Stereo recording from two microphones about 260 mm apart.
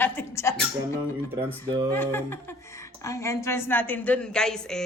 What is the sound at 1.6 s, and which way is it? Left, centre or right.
Speech, centre.